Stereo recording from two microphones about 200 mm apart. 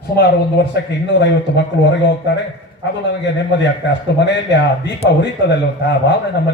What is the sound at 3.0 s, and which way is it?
A man's voice, 65° left (ahead or behind).